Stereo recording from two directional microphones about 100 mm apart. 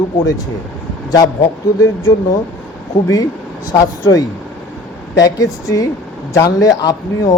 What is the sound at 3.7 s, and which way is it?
Speech, 40° left (ahead or behind).